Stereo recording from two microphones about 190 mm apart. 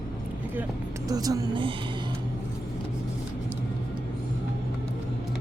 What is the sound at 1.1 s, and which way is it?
Speech, 20° right (ahead or behind).